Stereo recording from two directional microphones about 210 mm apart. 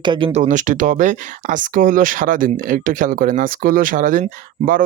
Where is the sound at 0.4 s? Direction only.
35° right (ahead or behind).